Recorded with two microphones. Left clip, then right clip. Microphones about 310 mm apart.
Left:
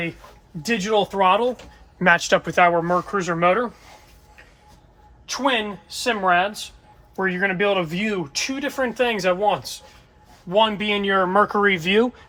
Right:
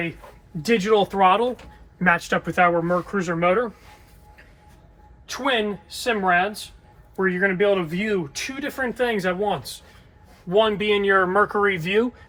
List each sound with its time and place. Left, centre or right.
0.6 s speech: centre
2.0 s speech: left
5.3 s speech: centre